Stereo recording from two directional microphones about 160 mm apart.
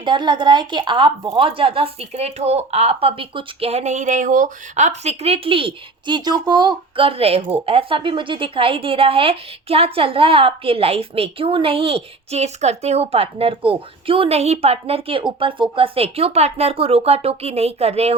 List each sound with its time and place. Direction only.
0.0 s speech: 30° right (ahead or behind)